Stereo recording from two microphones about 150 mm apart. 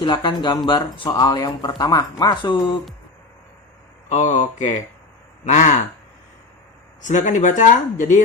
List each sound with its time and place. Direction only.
0.0 s speech: 30° left (ahead or behind)
4.1 s speech: 50° left (ahead or behind)
7.0 s speech: 55° left (ahead or behind)